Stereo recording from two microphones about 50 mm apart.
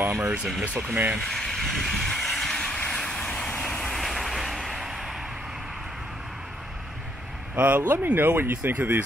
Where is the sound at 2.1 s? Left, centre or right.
Centre.